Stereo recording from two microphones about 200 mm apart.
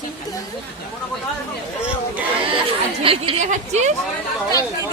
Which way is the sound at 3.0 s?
25° right (ahead or behind).